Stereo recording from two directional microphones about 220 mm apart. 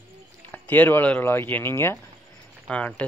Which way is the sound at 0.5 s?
10° left (ahead or behind).